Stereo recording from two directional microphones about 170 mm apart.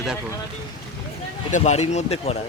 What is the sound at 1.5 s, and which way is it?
Speech, 40° left (ahead or behind).